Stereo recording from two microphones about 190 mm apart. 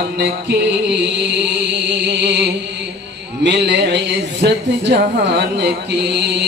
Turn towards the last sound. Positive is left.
turn(degrees=-65)  # may be behind; listen again after turning